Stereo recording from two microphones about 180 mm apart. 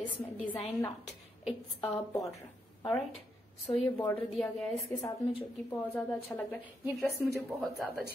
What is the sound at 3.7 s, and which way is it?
Speech, 30° left (ahead or behind).